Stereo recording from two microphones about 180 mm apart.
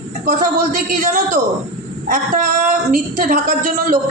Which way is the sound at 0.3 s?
45° right (ahead or behind).